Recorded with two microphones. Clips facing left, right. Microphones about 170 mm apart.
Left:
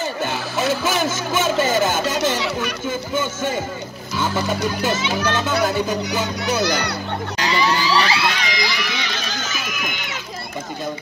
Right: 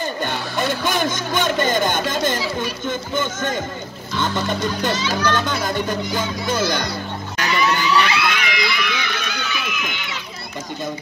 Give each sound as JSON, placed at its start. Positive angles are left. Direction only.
{"t": 0.2, "sound": "speech", "side_deg": 5}
{"t": 2.3, "sound": "chatter", "side_deg": 70}
{"t": 2.9, "sound": "speech", "side_deg": 10}
{"t": 4.2, "sound": "music", "side_deg": 5}
{"t": 5.2, "sound": "speech", "side_deg": 5}
{"t": 6.6, "sound": "a child's voice", "side_deg": 70}
{"t": 7.3, "sound": "crowd", "side_deg": 30}
{"t": 9.2, "sound": "a sound", "side_deg": 40}